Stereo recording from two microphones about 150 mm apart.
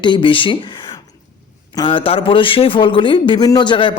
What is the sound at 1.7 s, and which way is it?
Speech, 35° left (ahead or behind).